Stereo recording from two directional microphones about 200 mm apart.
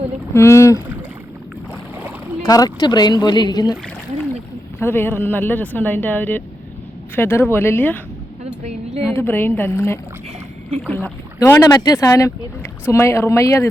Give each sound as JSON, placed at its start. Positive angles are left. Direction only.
{"t": 0.3, "sound": "speech", "side_deg": 15}
{"t": 2.4, "sound": "speech", "side_deg": 20}
{"t": 4.8, "sound": "speech", "side_deg": 10}
{"t": 9.1, "sound": "speech", "side_deg": 10}